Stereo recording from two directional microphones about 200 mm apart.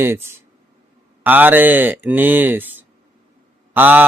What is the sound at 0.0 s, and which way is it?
Speech, 10° right (ahead or behind).